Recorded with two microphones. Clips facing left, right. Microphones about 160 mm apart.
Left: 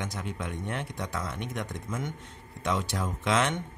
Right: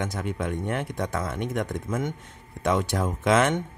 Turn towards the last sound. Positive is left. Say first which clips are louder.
# right 6 dB
turn(degrees=-50)  # may be behind; listen again after turning